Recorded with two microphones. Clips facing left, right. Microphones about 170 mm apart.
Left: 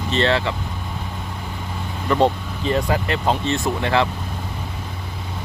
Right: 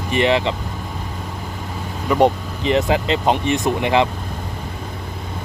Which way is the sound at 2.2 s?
20° right (ahead or behind).